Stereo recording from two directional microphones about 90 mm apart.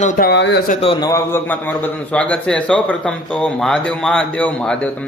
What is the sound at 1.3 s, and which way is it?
A man's voice, 25° left (ahead or behind).